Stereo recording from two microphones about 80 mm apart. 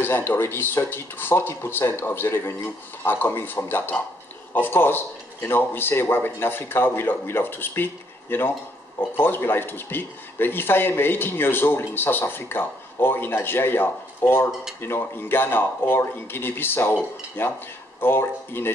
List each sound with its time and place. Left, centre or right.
0.0 s speech: left